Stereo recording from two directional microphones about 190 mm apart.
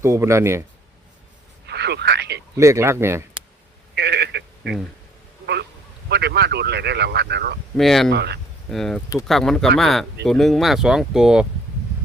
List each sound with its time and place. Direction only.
0.0 s speech: 15° right (ahead or behind)
1.6 s speech: 60° right (ahead or behind)
2.6 s speech: 15° right (ahead or behind)
3.9 s radio: 60° right (ahead or behind)
6.1 s speech: 60° right (ahead or behind)
7.8 s speech: centre (ahead or behind)
8.1 s speech: 60° right (ahead or behind)
8.7 s speech: centre (ahead or behind)